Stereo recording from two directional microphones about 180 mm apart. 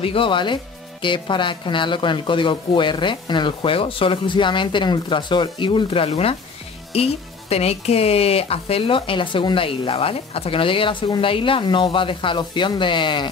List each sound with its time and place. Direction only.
0.0 s speech: 30° left (ahead or behind)